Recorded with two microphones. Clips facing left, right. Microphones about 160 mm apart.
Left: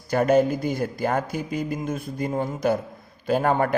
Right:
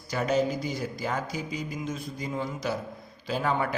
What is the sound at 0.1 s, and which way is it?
A man's voice, 55° left (ahead or behind).